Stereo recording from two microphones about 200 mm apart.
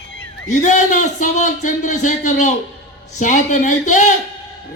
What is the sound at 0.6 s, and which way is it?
A man's voice, 35° left (ahead or behind).